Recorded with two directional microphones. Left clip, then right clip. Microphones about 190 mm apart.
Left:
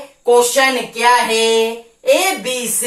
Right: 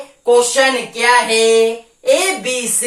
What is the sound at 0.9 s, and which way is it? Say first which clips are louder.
Female singing: right 1 dB; 20° right (ahead or behind).